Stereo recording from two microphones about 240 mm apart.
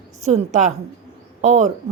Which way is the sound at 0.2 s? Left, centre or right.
Right.